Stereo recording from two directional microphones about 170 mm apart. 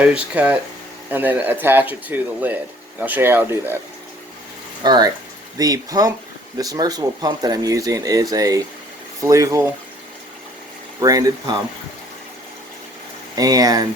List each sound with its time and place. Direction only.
0.0 s speech: 5° right (ahead or behind)
4.8 s speech: 25° right (ahead or behind)
11.0 s speech: 20° right (ahead or behind)
13.3 s speech: 20° right (ahead or behind)